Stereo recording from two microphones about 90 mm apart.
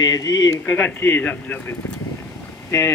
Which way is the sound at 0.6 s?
20° left (ahead or behind).